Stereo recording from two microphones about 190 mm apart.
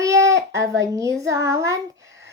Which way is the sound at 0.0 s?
15° right (ahead or behind).